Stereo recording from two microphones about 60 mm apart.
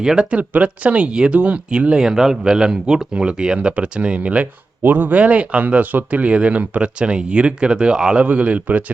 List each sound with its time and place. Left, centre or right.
0.0 s speech: centre